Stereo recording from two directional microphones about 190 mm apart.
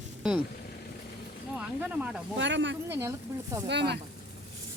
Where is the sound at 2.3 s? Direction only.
70° right (ahead or behind).